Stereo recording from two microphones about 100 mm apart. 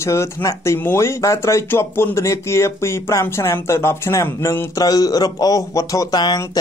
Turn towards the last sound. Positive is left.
turn(degrees=40)  # may be behind; listen again after turning